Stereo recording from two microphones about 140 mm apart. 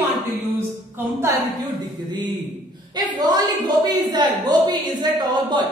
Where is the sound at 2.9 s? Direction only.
30° right (ahead or behind).